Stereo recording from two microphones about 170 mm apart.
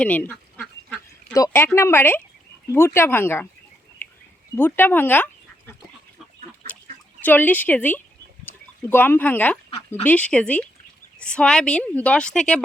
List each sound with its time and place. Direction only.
0.0 s duck: 10° left (ahead or behind)
1.3 s speech: 15° left (ahead or behind)
4.5 s speech: 10° left (ahead or behind)
7.3 s speech: 10° left (ahead or behind)